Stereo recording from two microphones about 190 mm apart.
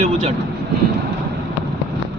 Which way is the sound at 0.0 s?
35° right (ahead or behind).